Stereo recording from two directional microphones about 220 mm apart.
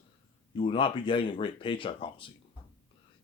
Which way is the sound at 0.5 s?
25° left (ahead or behind).